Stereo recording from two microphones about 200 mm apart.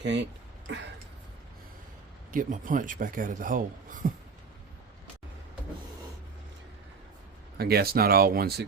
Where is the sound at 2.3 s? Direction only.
40° right (ahead or behind).